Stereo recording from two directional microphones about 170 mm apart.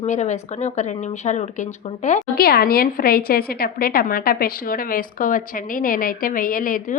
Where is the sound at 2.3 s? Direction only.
65° left (ahead or behind).